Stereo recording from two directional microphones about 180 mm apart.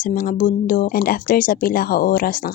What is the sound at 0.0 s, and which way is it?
Speech, 50° left (ahead or behind).